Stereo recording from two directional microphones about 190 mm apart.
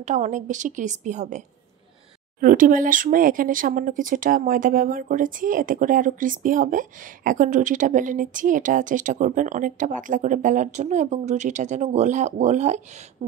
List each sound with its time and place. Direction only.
0.0 s a woman's voice: 40° right (ahead or behind)
2.4 s speech: 45° right (ahead or behind)